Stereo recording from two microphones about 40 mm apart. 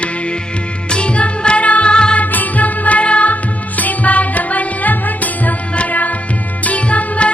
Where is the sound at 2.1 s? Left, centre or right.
Left.